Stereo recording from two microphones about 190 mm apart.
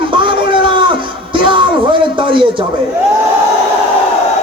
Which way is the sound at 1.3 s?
25° right (ahead or behind).